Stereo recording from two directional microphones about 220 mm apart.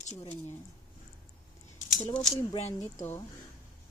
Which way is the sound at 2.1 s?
20° left (ahead or behind).